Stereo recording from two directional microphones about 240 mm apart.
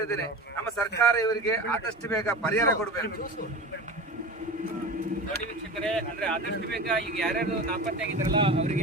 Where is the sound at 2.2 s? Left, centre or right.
Centre.